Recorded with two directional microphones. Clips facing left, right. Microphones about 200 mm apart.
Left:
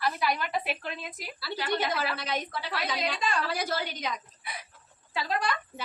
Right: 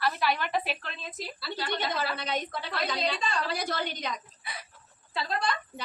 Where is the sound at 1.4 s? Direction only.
5° left (ahead or behind).